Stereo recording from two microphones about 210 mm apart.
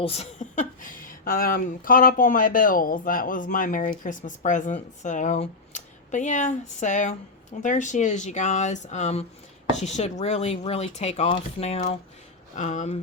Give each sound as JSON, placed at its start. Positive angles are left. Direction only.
{"t": 0.0, "sound": "speech", "side_deg": 30}